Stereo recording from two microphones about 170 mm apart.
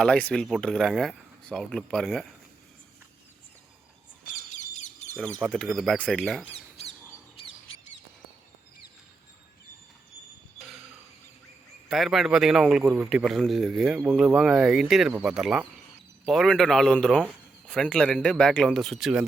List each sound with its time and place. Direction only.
0.0 s speech: 5° left (ahead or behind)
4.5 s bird: 40° left (ahead or behind)
5.4 s speech: centre (ahead or behind)
6.5 s a sound: 35° left (ahead or behind)
7.3 s bird: 30° left (ahead or behind)
11.9 s speech: centre (ahead or behind)